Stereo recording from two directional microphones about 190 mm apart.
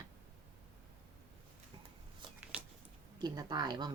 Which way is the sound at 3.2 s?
20° right (ahead or behind).